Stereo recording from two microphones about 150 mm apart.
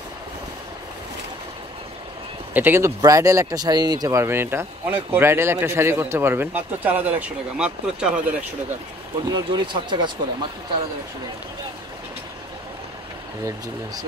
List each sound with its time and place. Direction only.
2.5 s speech: 15° right (ahead or behind)
9.3 s speech: 30° right (ahead or behind)